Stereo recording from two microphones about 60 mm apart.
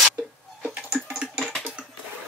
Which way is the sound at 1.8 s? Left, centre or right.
Centre.